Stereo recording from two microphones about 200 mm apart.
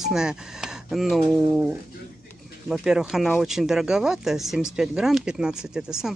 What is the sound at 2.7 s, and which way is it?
Speech, 5° right (ahead or behind).